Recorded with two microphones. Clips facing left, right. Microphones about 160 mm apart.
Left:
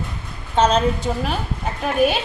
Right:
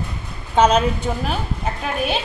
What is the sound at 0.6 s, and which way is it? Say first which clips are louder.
Speech: right 2 dB; 10° right (ahead or behind).